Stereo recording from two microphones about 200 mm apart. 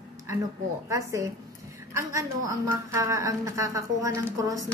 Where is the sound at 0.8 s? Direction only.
15° right (ahead or behind).